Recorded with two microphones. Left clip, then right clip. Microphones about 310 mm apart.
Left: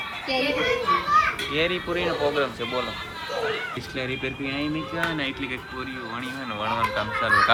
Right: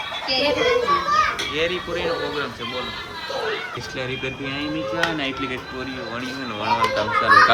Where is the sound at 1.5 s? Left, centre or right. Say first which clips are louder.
Right 1 dB; centre.